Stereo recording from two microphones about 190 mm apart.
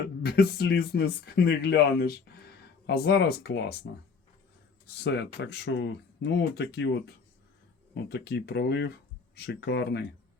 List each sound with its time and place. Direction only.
0.2 s speech: 55° left (ahead or behind)
4.9 s speech: 65° left (ahead or behind)